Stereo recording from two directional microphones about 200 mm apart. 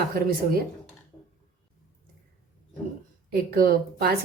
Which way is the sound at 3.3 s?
50° right (ahead or behind).